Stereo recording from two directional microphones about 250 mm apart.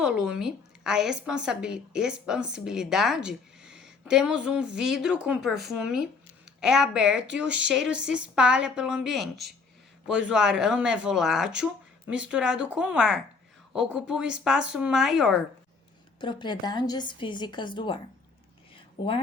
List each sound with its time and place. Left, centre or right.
0.0 s a woman's voice: centre
16.2 s a woman's voice: centre